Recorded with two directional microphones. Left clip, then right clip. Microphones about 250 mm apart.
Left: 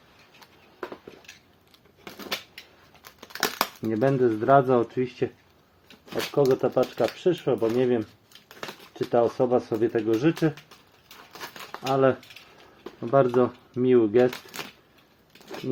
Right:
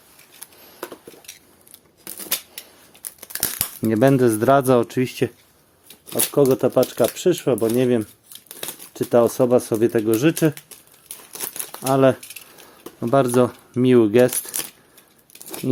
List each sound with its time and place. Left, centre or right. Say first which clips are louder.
3.0 s crumpling: right 4 dB; centre
3.8 s speech: right 8 dB; right
6.3 s speech: right 5 dB; right
9.0 s speech: right 6 dB; right
11.9 s speech: right 5 dB; right
14.5 s coin: right 4 dB; centre